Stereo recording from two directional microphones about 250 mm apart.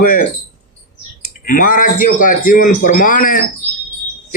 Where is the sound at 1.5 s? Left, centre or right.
Left.